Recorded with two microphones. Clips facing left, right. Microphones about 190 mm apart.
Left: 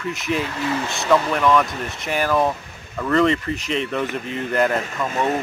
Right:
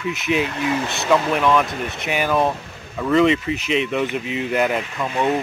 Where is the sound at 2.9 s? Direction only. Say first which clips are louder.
Right 2 dB; 10° right (ahead or behind).